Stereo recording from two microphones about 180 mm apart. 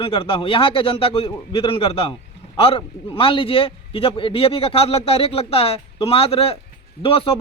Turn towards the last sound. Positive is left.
turn(degrees=30)  # may be behind; listen again after turning